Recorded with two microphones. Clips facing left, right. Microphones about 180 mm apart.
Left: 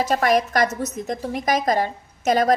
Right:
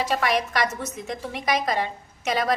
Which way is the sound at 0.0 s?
45° left (ahead or behind).